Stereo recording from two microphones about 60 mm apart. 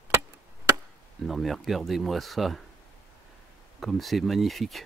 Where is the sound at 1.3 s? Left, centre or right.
Centre.